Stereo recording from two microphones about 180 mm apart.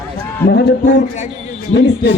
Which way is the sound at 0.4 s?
65° left (ahead or behind).